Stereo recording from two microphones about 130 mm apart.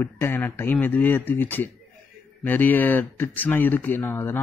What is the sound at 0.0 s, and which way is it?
Speech, 15° left (ahead or behind).